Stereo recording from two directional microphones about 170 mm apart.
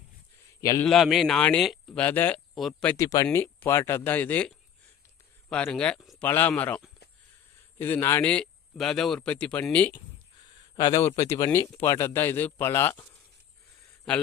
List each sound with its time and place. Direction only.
0.6 s a man's voice: 20° left (ahead or behind)
0.9 s speech: centre (ahead or behind)
2.9 s a man's voice: 20° left (ahead or behind)
10.8 s a man's voice: 20° left (ahead or behind)